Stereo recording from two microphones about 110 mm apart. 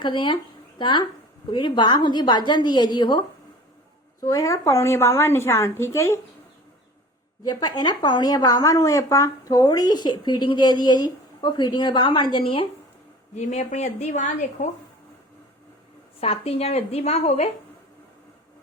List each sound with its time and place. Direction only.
0.0 s a woman's voice: 45° left (ahead or behind)
4.2 s a woman's voice: 30° left (ahead or behind)
7.4 s a woman's voice: 40° left (ahead or behind)
13.3 s speech: 90° left
16.2 s a woman's voice: 65° left (ahead or behind); by 17.5 s 85° left